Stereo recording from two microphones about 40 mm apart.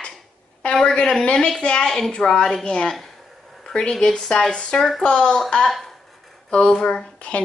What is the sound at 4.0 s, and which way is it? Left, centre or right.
A woman's voice, centre.